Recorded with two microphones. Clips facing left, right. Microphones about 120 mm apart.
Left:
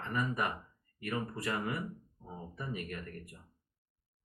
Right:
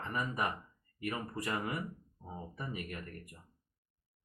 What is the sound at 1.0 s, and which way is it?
Speech, 15° right (ahead or behind).